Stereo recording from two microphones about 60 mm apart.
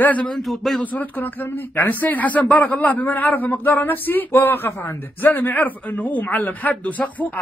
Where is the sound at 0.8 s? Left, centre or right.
Left.